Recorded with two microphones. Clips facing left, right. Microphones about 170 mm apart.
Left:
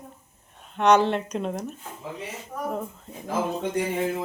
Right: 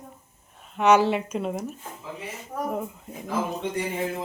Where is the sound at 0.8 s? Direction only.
5° right (ahead or behind).